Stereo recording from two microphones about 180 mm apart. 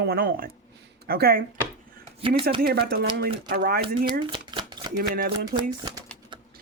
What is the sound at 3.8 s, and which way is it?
Speech, 25° right (ahead or behind).